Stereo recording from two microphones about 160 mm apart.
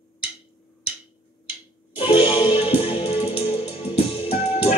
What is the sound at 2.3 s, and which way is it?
Music, 30° left (ahead or behind).